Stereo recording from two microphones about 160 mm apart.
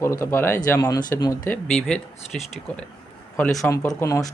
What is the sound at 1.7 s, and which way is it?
Speech, 5° left (ahead or behind).